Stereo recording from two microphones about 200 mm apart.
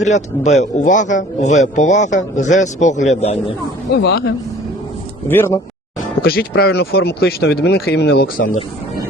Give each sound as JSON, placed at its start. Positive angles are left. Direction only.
{"t": 0.0, "sound": "speech", "side_deg": 35}
{"t": 3.9, "sound": "speech", "side_deg": 55}
{"t": 5.3, "sound": "speech", "side_deg": 10}
{"t": 6.2, "sound": "speech", "side_deg": 50}